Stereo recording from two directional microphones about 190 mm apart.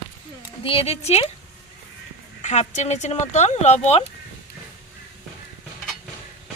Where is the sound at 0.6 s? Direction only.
30° left (ahead or behind).